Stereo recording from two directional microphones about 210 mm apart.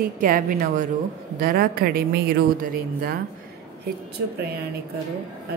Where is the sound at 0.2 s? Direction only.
40° right (ahead or behind).